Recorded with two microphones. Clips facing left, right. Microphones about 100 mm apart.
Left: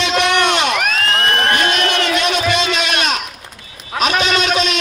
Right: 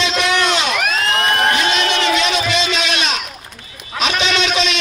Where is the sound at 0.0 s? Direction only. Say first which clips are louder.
Left 2 dB; 60° left (ahead or behind).